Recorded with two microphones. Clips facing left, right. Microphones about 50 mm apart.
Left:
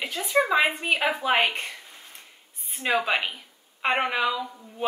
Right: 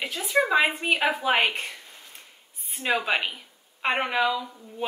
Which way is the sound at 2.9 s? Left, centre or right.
Centre.